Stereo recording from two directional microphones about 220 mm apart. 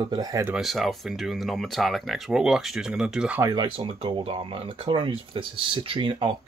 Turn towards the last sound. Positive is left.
turn(degrees=-25)  # may be behind; listen again after turning